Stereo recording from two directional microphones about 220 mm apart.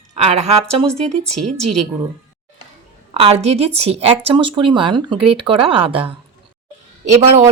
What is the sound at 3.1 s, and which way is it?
Speech, 30° right (ahead or behind).